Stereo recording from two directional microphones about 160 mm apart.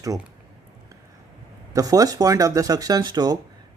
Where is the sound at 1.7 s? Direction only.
20° right (ahead or behind).